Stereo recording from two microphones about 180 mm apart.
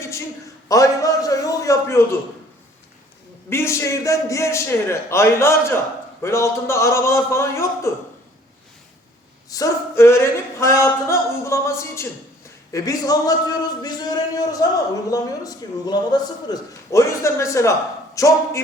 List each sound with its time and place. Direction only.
0.7 s a man's voice: 20° left (ahead or behind)
3.5 s a man's voice: 15° left (ahead or behind)
9.5 s a man's voice: 20° left (ahead or behind)